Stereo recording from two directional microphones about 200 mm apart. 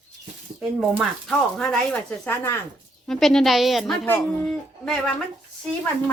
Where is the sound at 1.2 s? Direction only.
Centre (ahead or behind).